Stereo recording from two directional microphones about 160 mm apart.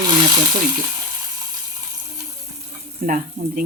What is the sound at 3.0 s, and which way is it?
Speech, 60° right (ahead or behind).